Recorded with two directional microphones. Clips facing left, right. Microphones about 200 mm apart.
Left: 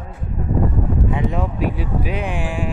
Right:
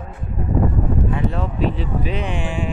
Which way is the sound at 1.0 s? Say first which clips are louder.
Left 1 dB; 15° left (ahead or behind).